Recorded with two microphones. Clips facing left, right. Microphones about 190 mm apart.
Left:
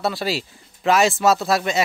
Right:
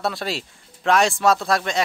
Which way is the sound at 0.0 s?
Centre (ahead or behind).